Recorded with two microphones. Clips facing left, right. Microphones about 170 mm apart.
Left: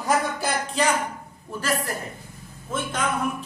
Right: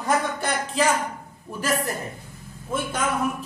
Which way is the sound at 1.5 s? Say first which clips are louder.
Right 1 dB; 15° right (ahead or behind).